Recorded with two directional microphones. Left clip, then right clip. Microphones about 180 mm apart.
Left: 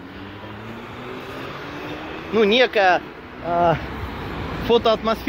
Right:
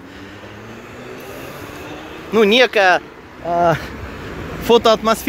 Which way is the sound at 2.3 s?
40° right (ahead or behind).